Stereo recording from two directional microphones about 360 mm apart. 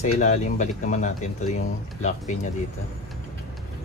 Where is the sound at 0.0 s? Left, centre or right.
Centre.